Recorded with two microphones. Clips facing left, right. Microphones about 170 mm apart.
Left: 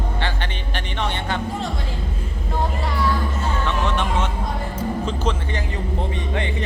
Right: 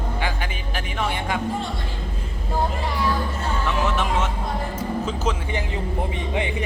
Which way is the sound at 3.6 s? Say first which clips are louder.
Right 1 dB; 5° right (ahead or behind).